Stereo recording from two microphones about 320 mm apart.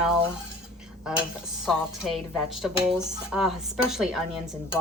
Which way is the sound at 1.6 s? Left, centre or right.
Centre.